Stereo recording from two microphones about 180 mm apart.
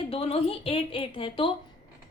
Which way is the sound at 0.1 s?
35° left (ahead or behind).